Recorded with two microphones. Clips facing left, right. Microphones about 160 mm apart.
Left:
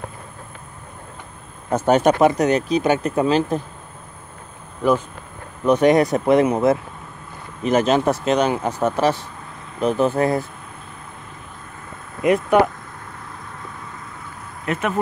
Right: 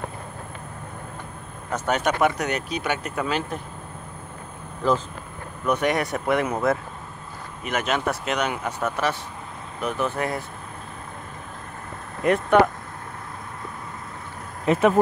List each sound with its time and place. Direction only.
1.7 s speech: 30° left (ahead or behind)
5.7 s speech: 25° left (ahead or behind)
7.6 s speech: 30° left (ahead or behind)
8.6 s speech: 40° left (ahead or behind)
12.2 s speech: 10° left (ahead or behind)
14.7 s speech: 35° right (ahead or behind)